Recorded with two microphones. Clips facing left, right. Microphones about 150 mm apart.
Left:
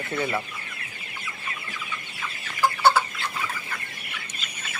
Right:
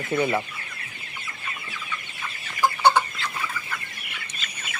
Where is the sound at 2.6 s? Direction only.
15° right (ahead or behind).